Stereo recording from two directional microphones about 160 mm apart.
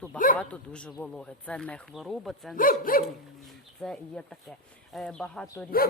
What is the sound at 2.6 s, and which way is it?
Speech, 60° left (ahead or behind).